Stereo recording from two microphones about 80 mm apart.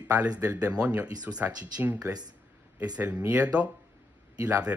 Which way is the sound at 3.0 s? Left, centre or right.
Centre.